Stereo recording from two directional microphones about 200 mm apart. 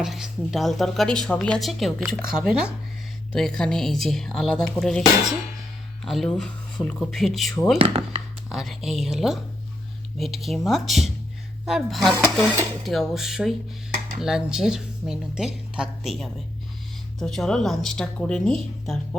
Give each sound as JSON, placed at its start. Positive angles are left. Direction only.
{"t": 0.0, "sound": "speech", "side_deg": 0}
{"t": 6.1, "sound": "speech", "side_deg": 0}
{"t": 7.8, "sound": "speech", "side_deg": -30}
{"t": 8.4, "sound": "speech", "side_deg": 0}